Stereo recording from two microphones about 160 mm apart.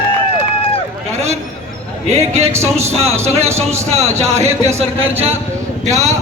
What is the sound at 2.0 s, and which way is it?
Speech, 40° right (ahead or behind).